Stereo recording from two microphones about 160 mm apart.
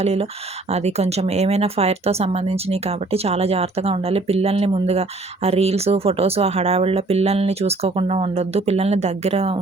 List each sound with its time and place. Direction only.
0.0 s speech: 40° right (ahead or behind)